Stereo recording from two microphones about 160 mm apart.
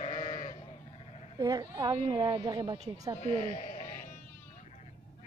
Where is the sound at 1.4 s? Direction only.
25° right (ahead or behind).